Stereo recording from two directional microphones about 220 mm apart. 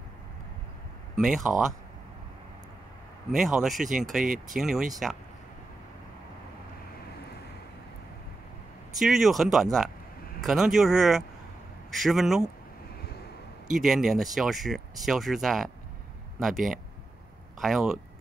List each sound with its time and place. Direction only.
1.1 s speech: centre (ahead or behind)
3.3 s speech: centre (ahead or behind)
4.2 s speech: 40° right (ahead or behind)
4.6 s speech: centre (ahead or behind)
8.9 s speech: centre (ahead or behind)
13.7 s speech: centre (ahead or behind)